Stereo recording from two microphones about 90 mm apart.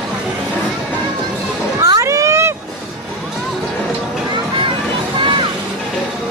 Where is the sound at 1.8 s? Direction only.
35° right (ahead or behind).